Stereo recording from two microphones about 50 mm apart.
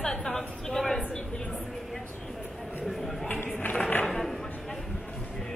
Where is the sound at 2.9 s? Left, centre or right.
Centre.